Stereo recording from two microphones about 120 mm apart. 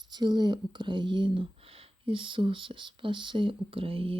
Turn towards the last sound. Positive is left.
turn(degrees=-50)  # may be behind; listen again after turning